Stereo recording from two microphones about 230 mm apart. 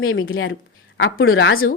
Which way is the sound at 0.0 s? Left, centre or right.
Left.